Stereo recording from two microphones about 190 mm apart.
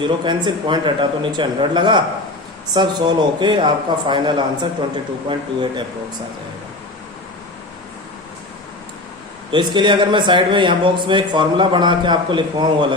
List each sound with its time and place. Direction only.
0.3 s a man's voice: 25° right (ahead or behind)
9.5 s a man's voice: 25° right (ahead or behind)